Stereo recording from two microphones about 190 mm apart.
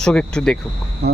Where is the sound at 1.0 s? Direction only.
60° right (ahead or behind).